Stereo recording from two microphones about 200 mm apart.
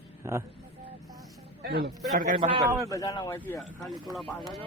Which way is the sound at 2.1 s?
40° right (ahead or behind).